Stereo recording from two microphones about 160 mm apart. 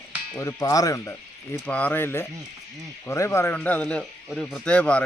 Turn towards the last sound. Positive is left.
turn(degrees=5)  # may be behind; listen again after turning